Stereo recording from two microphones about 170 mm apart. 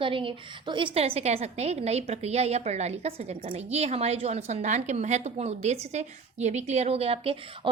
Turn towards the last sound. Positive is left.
turn(degrees=-35)  # may be behind; listen again after turning